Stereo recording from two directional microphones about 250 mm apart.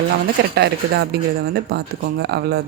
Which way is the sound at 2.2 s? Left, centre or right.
Right.